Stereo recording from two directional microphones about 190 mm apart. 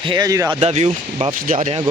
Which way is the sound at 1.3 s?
45° right (ahead or behind).